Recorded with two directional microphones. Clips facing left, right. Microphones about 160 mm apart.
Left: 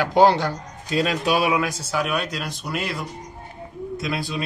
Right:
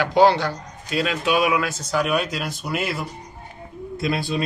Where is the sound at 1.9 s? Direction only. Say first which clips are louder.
Right 4 dB; centre (ahead or behind).